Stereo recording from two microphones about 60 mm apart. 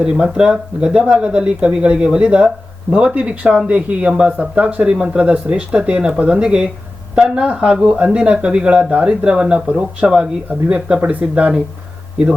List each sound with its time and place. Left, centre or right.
0.0 s speech: centre